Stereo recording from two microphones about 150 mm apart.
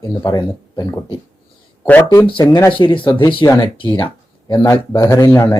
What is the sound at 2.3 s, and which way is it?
Speech, 35° left (ahead or behind).